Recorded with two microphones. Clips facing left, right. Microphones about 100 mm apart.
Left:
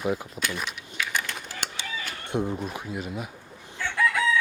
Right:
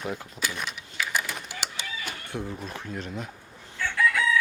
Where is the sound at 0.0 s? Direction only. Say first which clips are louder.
Left 6 dB; 10° left (ahead or behind).